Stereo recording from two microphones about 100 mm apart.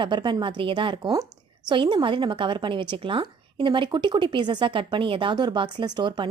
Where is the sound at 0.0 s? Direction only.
50° right (ahead or behind).